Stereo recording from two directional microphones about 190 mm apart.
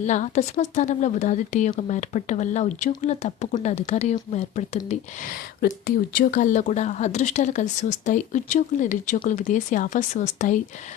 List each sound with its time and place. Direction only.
0.0 s speech: 40° left (ahead or behind)